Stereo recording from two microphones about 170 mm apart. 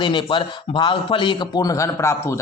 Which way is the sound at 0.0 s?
30° left (ahead or behind).